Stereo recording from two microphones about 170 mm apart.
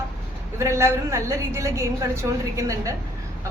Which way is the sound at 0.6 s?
15° right (ahead or behind).